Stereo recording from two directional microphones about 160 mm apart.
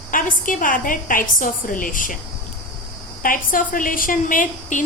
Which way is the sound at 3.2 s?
60° left (ahead or behind).